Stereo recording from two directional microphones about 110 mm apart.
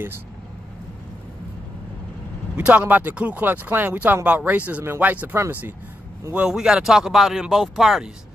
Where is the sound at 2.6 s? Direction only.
10° right (ahead or behind).